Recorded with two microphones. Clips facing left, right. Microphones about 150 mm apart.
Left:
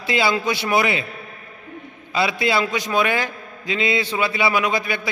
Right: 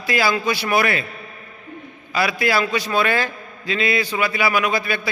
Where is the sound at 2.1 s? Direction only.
25° left (ahead or behind).